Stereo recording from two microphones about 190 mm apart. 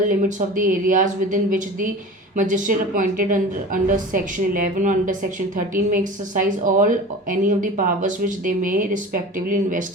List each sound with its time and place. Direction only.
0.1 s speech: 45° right (ahead or behind)